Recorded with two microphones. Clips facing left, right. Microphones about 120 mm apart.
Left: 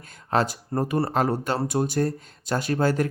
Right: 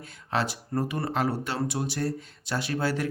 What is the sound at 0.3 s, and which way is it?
Speech, 45° left (ahead or behind).